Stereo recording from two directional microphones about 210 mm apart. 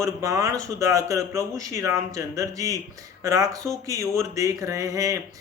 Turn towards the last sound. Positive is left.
turn(degrees=-15)  # may be behind; listen again after turning